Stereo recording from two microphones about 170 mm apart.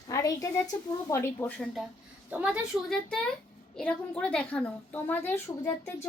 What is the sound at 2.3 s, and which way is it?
A woman's voice, 5° right (ahead or behind).